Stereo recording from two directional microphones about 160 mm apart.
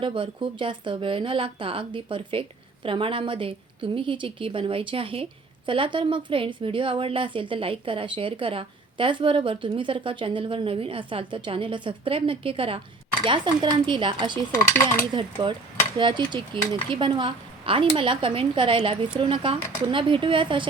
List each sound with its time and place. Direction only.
0.0 s a woman's voice: 30° right (ahead or behind)